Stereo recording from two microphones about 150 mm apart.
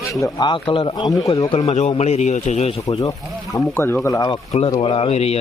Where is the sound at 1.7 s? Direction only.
50° left (ahead or behind).